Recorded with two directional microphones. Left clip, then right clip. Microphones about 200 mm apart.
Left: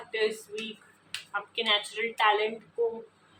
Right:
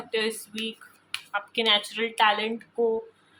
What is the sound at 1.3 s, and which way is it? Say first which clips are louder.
Speech: right 4 dB; 55° right (ahead or behind).